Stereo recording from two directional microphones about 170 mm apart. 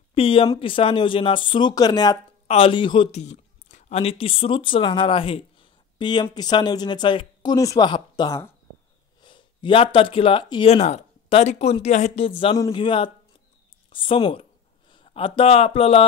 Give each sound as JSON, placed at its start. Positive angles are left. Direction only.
{"t": 0.1, "sound": "speech", "side_deg": 35}
{"t": 2.4, "sound": "speech", "side_deg": 35}
{"t": 3.2, "sound": "speech", "side_deg": 45}